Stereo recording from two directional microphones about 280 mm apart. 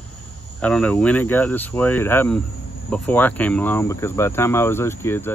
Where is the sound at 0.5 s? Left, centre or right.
Centre.